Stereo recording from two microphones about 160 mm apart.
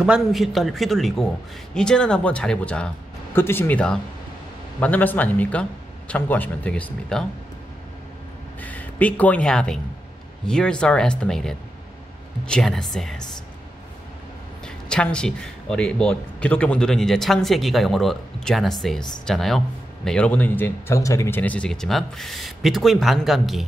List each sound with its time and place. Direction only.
0.0 s a man's voice: centre (ahead or behind)
8.5 s a man's voice: 10° left (ahead or behind)
14.9 s a man's voice: 5° left (ahead or behind)